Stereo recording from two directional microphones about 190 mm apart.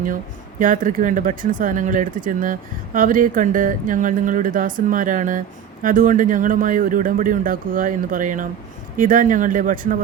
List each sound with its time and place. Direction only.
0.6 s speech: 45° right (ahead or behind)